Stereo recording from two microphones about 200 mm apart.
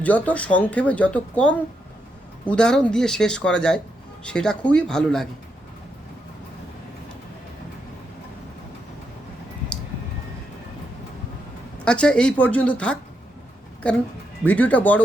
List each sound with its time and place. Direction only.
0.0 s speech: 5° left (ahead or behind)
11.9 s speech: 5° left (ahead or behind)